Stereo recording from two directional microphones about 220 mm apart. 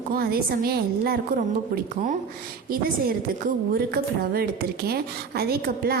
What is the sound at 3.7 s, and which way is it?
A woman's voice, 45° right (ahead or behind).